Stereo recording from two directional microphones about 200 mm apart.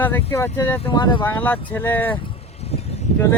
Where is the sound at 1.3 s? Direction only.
10° left (ahead or behind).